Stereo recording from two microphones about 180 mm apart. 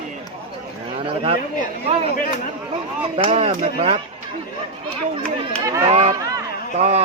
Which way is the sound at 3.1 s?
30° right (ahead or behind).